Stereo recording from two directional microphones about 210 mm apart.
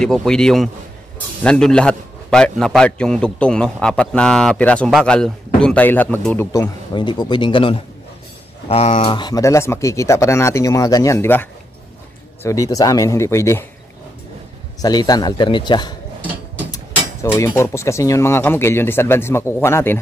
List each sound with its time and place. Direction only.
0.0 s a man's voice: 5° left (ahead or behind)
6.9 s a man's voice: 20° left (ahead or behind)
12.4 s speech: 15° left (ahead or behind)
14.8 s a man's voice: 20° left (ahead or behind)
16.5 s a sound: 15° left (ahead or behind)
17.4 s speech: 15° left (ahead or behind)